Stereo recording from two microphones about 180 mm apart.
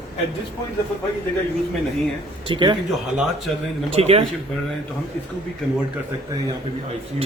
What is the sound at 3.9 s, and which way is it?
Speech, 35° right (ahead or behind).